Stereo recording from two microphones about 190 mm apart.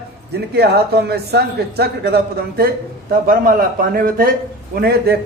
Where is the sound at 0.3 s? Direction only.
60° right (ahead or behind).